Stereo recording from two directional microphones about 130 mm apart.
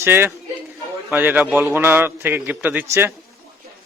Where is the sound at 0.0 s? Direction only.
15° right (ahead or behind).